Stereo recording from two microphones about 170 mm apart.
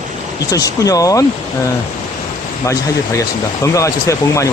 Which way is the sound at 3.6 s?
20° left (ahead or behind).